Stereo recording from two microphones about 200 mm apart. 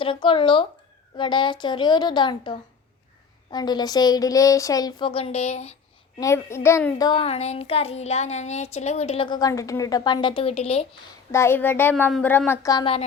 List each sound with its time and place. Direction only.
0.0 s a child's voice: 25° left (ahead or behind)
6.1 s a child's voice: 15° left (ahead or behind); by 10.8 s 30° left (ahead or behind)
11.3 s a woman's voice: 15° left (ahead or behind)